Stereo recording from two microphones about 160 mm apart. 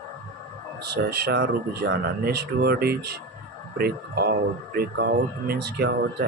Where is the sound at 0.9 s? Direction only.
90° right.